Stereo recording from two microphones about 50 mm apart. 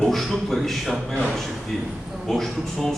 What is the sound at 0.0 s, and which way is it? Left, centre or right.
Speech, centre.